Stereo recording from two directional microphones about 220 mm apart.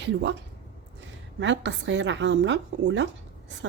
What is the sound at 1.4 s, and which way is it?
A woman's voice, 55° right (ahead or behind).